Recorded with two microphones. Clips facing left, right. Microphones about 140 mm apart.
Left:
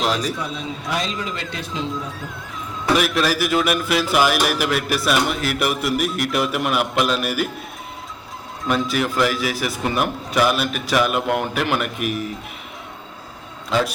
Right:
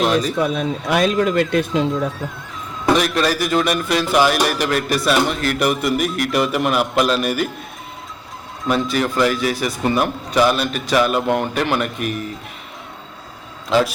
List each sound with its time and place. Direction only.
0.0 s speech: centre (ahead or behind)
0.3 s speech: 60° right (ahead or behind)
2.9 s a man's voice: 5° left (ahead or behind)
8.6 s a man's voice: centre (ahead or behind)
13.7 s a man's voice: 5° right (ahead or behind)